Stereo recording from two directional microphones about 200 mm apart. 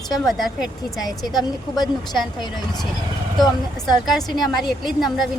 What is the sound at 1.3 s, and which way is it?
Speech, centre (ahead or behind).